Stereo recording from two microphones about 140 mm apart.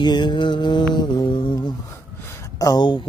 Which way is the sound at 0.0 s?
30° left (ahead or behind).